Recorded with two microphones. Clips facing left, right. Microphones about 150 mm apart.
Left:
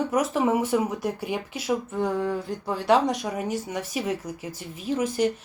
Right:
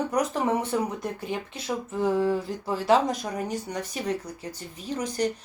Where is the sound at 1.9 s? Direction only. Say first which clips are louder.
Right 2 dB; centre (ahead or behind).